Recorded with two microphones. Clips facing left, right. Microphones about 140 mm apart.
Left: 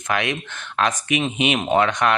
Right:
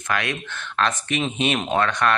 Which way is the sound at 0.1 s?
20° left (ahead or behind).